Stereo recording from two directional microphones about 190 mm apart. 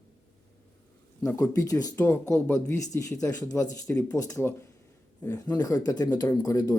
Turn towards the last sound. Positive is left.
turn(degrees=15)  # may be behind; listen again after turning